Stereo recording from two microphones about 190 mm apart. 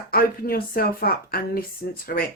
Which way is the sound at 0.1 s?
50° left (ahead or behind).